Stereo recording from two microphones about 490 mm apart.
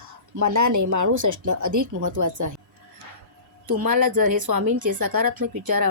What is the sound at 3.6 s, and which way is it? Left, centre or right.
A woman's voice, right.